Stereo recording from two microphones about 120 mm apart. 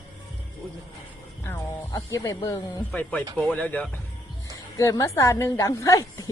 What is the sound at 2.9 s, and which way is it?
Speech, 10° left (ahead or behind).